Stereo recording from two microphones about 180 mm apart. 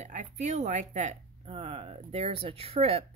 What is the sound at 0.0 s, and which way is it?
Speech, 40° right (ahead or behind).